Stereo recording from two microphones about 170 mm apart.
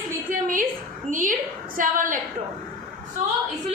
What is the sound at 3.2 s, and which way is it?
Speech, 50° right (ahead or behind).